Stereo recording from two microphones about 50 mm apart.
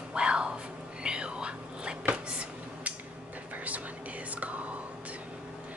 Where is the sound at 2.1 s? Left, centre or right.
Right.